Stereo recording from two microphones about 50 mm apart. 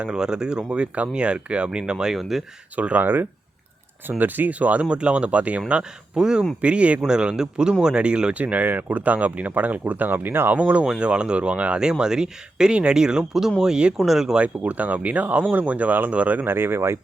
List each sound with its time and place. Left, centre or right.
0.0 s speech: centre
2.7 s speech: right
3.0 s speech: right
10.5 s speech: right
10.8 s speech: centre
13.9 s speech: centre
14.3 s speech: right
16.5 s speech: right